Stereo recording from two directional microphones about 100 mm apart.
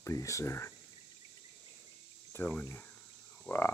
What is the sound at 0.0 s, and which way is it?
Speech, 30° left (ahead or behind).